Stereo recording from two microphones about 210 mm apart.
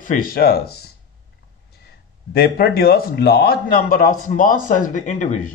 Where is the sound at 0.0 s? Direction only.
40° left (ahead or behind).